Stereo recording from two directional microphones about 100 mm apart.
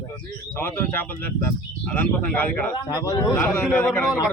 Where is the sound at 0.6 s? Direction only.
25° left (ahead or behind).